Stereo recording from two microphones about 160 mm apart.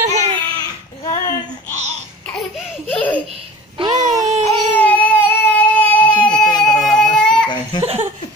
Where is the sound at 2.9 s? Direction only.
10° left (ahead or behind).